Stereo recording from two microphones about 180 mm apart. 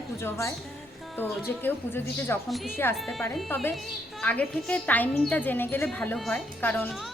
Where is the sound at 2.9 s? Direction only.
Centre (ahead or behind).